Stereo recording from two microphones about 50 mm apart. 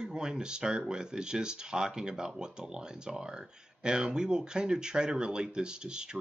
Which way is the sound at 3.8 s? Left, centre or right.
Centre.